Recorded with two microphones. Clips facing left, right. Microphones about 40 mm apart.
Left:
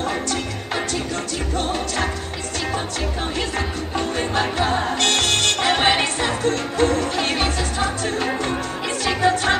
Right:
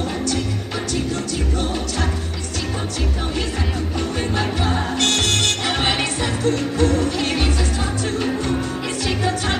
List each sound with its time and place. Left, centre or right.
4.4 s music: left